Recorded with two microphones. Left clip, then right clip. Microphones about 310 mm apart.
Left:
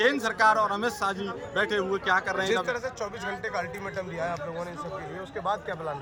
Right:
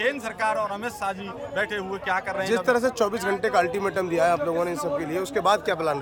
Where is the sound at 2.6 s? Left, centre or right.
Right.